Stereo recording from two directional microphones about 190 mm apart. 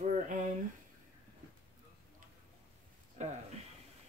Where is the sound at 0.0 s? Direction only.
40° right (ahead or behind).